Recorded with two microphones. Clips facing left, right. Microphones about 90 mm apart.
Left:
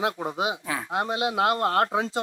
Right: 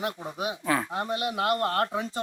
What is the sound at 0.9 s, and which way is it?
Speech, 90° left.